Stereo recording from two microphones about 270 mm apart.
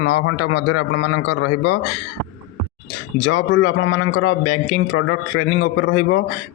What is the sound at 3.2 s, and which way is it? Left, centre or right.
Speech, left.